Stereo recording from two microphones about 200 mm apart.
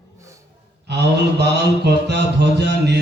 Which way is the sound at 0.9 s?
60° right (ahead or behind).